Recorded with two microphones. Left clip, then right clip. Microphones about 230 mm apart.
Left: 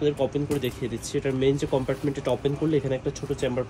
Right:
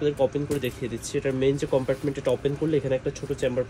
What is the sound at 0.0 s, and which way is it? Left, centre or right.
Speech, centre.